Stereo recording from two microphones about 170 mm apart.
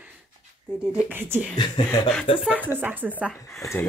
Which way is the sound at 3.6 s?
15° left (ahead or behind).